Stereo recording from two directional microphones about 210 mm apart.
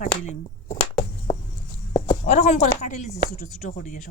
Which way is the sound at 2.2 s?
35° left (ahead or behind).